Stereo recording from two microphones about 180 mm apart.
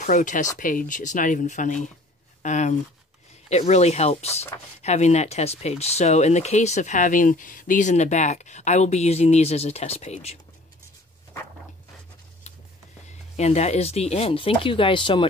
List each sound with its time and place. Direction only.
0.0 s speech: 45° left (ahead or behind)
13.1 s speech: 35° left (ahead or behind)